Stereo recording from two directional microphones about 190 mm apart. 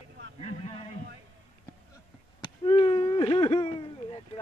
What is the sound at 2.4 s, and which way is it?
Speech, 30° left (ahead or behind).